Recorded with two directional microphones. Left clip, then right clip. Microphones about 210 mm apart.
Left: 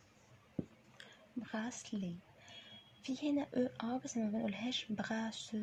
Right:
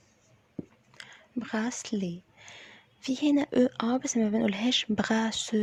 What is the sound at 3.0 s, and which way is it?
Speech, 55° right (ahead or behind).